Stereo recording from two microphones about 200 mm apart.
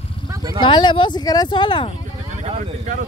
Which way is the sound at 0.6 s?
25° left (ahead or behind).